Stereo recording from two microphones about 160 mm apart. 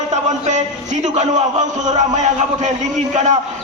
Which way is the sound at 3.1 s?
45° right (ahead or behind).